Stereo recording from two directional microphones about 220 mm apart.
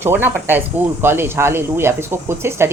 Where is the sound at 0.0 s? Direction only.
10° right (ahead or behind).